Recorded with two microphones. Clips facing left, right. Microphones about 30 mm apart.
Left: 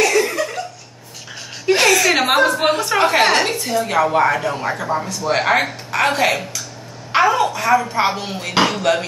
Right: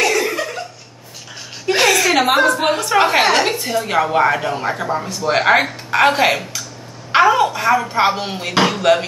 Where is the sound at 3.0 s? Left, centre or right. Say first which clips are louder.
Right 1 dB; centre.